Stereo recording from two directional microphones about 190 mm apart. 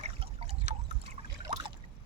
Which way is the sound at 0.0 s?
30° right (ahead or behind).